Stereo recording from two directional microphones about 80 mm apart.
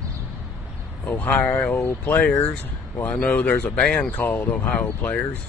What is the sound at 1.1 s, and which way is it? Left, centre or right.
Speech, left.